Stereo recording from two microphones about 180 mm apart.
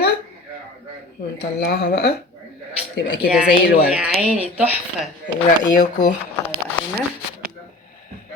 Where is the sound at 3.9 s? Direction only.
5° right (ahead or behind).